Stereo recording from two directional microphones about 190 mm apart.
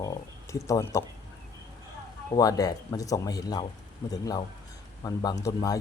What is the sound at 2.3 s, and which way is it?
Speech, 20° left (ahead or behind).